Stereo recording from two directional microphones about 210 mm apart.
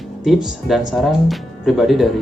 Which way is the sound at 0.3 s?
Centre (ahead or behind).